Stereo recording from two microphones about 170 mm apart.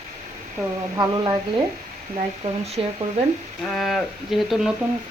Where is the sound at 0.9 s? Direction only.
25° right (ahead or behind).